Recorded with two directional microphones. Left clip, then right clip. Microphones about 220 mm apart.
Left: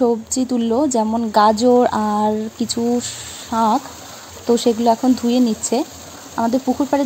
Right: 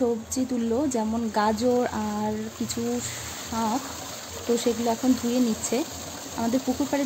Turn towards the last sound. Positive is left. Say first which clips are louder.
# left 8 dB
turn(degrees=0)  # may be behind; listen again after turning